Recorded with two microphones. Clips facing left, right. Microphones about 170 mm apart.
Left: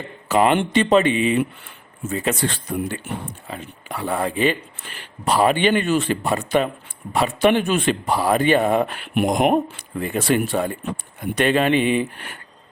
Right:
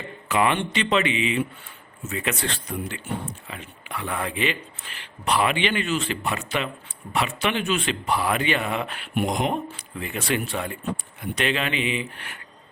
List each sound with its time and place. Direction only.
0.3 s speech: 40° left (ahead or behind)